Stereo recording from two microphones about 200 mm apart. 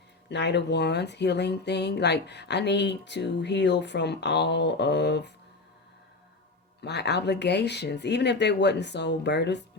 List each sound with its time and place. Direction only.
0.3 s speech: 60° left (ahead or behind)
6.8 s speech: 55° left (ahead or behind)